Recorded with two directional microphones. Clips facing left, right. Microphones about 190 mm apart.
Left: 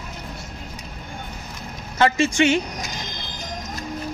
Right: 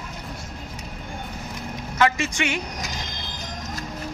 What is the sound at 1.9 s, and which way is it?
Speech, 30° left (ahead or behind).